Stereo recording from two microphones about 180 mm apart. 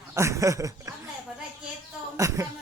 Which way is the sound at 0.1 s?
15° right (ahead or behind).